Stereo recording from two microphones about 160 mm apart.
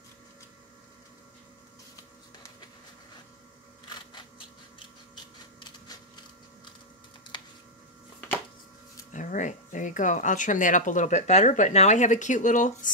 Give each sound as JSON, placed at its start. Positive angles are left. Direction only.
{"t": 5.6, "sound": "typewriter", "side_deg": 30}
{"t": 9.1, "sound": "speech", "side_deg": 50}